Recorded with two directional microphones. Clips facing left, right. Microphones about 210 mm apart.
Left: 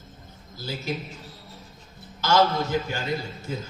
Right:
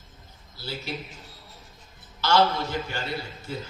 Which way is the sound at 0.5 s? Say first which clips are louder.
Left 4 dB; 45° left (ahead or behind).